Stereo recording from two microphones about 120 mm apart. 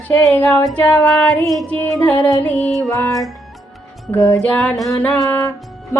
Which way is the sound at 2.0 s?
10° left (ahead or behind).